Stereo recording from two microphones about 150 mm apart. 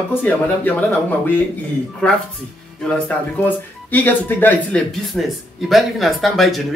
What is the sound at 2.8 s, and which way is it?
Speech, 10° left (ahead or behind).